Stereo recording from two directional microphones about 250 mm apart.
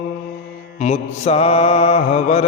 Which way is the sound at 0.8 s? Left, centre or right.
Left.